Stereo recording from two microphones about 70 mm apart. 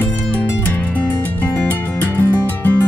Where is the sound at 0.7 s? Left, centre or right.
Left.